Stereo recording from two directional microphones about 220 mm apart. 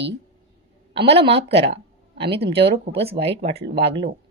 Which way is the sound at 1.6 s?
25° right (ahead or behind).